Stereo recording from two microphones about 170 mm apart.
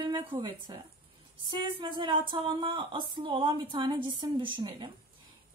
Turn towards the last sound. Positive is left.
turn(degrees=-25)  # may be behind; listen again after turning